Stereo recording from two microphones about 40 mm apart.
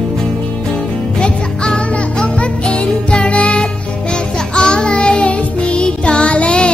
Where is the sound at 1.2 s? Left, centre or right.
Left.